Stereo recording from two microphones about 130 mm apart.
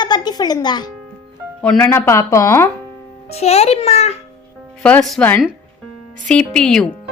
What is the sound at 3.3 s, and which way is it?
Speech, 55° left (ahead or behind).